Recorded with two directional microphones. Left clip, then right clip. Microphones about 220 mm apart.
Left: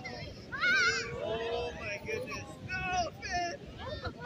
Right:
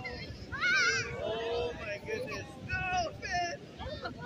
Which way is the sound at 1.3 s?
25° left (ahead or behind).